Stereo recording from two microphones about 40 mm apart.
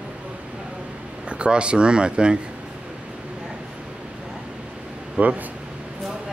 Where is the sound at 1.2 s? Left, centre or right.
Right.